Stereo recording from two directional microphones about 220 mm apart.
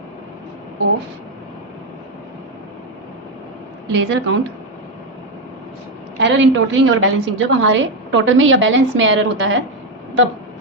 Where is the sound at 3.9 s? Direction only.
55° right (ahead or behind).